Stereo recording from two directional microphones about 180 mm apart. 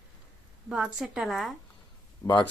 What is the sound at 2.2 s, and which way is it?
Speech, 20° left (ahead or behind).